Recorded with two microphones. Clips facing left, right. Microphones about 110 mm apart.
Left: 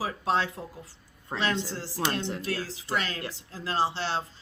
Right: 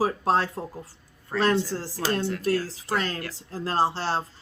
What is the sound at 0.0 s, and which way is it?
Speech, 40° right (ahead or behind).